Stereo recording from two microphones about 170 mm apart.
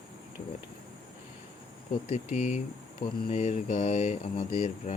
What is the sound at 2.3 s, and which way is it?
Speech, 40° left (ahead or behind).